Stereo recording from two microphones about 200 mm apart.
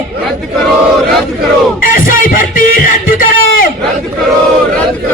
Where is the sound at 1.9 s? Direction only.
45° left (ahead or behind).